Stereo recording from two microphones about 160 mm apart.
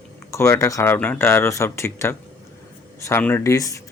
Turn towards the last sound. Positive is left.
turn(degrees=20)  # may be behind; listen again after turning